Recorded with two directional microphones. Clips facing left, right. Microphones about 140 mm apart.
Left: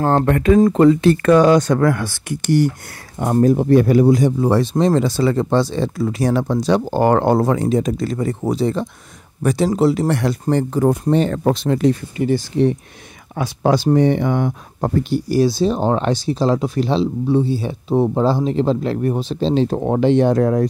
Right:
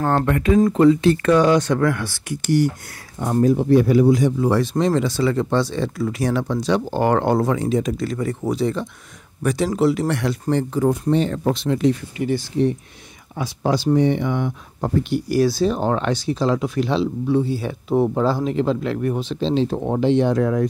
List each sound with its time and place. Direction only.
0.0 s speech: 35° left (ahead or behind)
2.0 s speech: 55° left (ahead or behind)
11.5 s speech: 40° left (ahead or behind)
13.4 s speech: 55° left (ahead or behind); by 19.5 s 35° left (ahead or behind)
19.5 s speech: 50° left (ahead or behind)